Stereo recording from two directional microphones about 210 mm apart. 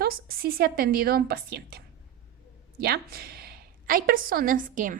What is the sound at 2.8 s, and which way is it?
A woman's voice, 50° right (ahead or behind).